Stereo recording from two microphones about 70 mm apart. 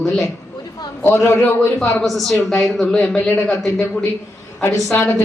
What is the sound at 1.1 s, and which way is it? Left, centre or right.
Speech, left.